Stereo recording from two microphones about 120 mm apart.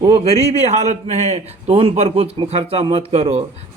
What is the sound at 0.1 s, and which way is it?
A man's voice, 60° right (ahead or behind).